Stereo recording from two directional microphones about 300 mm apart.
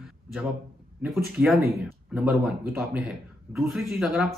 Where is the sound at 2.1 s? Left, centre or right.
Centre.